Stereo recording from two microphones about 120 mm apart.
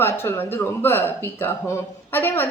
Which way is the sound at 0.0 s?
20° left (ahead or behind).